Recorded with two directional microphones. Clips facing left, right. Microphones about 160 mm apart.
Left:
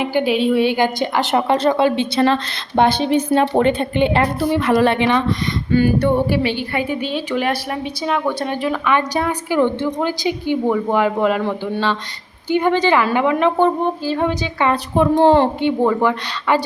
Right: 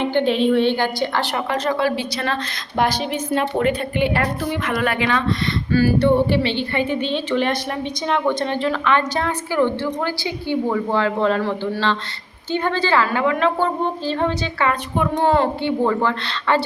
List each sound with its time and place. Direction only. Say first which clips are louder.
0.0 s a woman's voice: left 1 dB; 5° left (ahead or behind)
14.7 s a woman's voice: left 9 dB; 30° left (ahead or behind)